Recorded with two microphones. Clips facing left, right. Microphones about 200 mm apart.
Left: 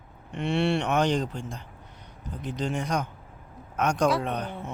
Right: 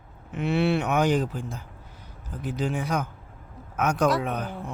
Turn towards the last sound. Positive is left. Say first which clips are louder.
# right 1 dB
turn(degrees=-5)  # may be behind; listen again after turning